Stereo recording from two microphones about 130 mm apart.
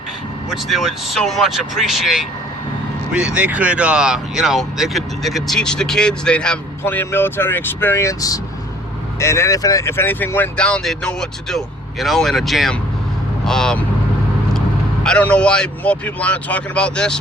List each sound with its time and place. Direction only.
0.5 s speech: centre (ahead or behind)
15.0 s speech: 10° left (ahead or behind)